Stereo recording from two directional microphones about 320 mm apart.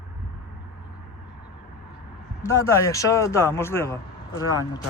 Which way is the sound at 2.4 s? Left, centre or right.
Centre.